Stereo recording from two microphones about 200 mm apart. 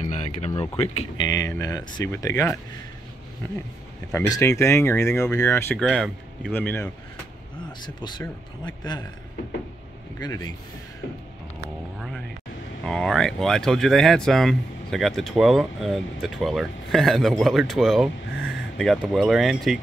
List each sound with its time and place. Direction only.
0.0 s speech: 30° left (ahead or behind)
1.2 s speech: 15° left (ahead or behind)
4.1 s speech: 15° left (ahead or behind)
7.8 s speech: 20° left (ahead or behind)
10.1 s speech: 15° left (ahead or behind)
12.8 s speech: 5° left (ahead or behind)